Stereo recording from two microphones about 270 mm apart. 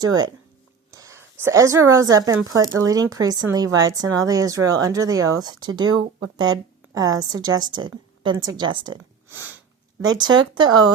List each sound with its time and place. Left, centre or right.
0.0 s a woman's voice: centre